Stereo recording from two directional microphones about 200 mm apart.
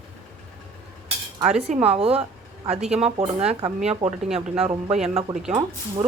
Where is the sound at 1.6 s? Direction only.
30° right (ahead or behind).